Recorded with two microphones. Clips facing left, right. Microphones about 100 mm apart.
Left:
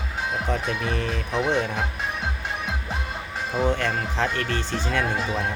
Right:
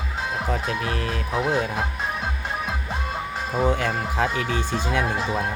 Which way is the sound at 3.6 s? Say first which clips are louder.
Right 1 dB; 10° right (ahead or behind).